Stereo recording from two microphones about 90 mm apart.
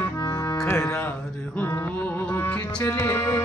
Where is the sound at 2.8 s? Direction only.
30° left (ahead or behind).